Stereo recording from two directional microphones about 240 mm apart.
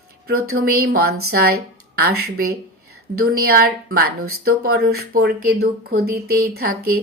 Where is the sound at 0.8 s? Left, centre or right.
Right.